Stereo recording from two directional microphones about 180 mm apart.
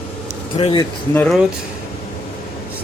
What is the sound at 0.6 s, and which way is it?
Speech, 30° left (ahead or behind).